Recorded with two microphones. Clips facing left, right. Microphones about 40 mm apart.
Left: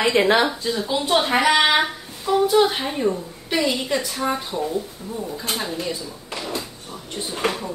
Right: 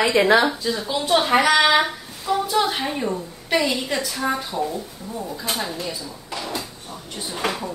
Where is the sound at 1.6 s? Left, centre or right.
Left.